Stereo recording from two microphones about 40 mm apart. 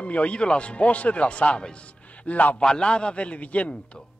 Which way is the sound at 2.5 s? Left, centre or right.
Left.